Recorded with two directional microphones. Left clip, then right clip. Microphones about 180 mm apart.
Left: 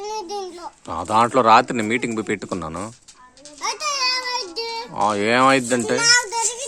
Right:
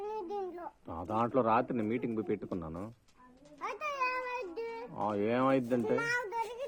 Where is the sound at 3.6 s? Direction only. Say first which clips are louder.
Left 12 dB; 5° right (ahead or behind).